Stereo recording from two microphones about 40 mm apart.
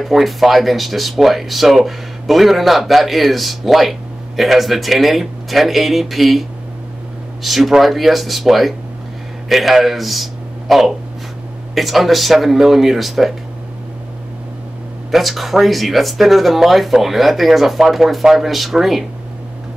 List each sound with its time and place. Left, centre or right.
0.0 s speech: centre
7.4 s a man's voice: centre
15.0 s speech: centre